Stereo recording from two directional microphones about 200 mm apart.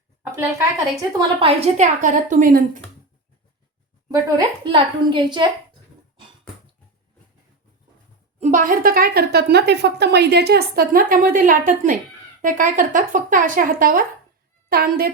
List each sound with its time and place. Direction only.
0.9 s a woman's voice: 25° right (ahead or behind); by 2.8 s 45° right (ahead or behind)
4.1 s a woman's voice: 15° right (ahead or behind)
8.4 s a woman's voice: 40° right (ahead or behind)